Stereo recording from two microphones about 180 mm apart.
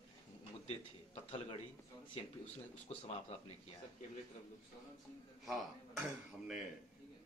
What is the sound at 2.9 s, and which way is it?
Speech, 35° left (ahead or behind).